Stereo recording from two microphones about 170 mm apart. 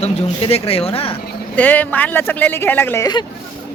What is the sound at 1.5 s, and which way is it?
Speech, 10° left (ahead or behind).